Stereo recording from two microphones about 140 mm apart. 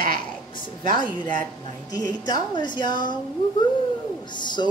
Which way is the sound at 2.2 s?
30° left (ahead or behind).